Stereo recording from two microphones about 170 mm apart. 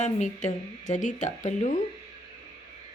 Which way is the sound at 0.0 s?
45° left (ahead or behind).